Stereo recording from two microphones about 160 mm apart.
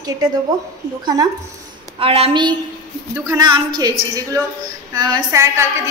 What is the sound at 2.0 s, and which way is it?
Speech, 35° right (ahead or behind).